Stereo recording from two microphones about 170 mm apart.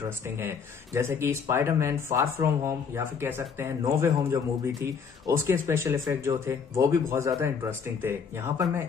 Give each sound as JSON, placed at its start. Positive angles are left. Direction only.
{"t": 0.4, "sound": "speech", "side_deg": -15}